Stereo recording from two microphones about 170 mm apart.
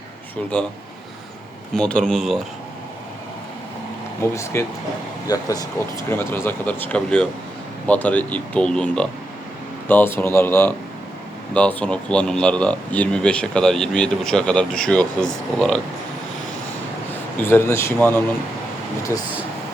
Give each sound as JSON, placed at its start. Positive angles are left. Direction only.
{"t": 1.7, "sound": "speech", "side_deg": 5}
{"t": 4.2, "sound": "speech", "side_deg": 15}
{"t": 17.3, "sound": "speech", "side_deg": 15}